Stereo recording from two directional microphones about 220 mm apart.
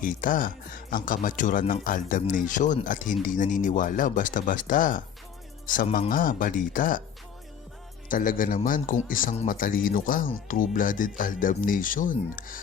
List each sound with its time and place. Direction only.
0.0 s speech: 40° left (ahead or behind)
8.0 s speech: 40° left (ahead or behind)